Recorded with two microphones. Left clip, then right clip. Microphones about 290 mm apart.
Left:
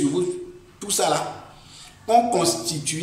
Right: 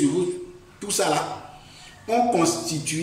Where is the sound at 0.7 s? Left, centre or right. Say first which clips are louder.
Left 1 dB; centre.